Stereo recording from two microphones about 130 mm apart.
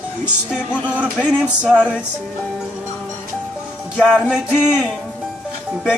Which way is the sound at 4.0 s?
5° right (ahead or behind).